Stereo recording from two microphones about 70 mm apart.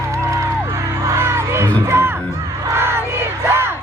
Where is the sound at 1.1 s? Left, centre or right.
Right.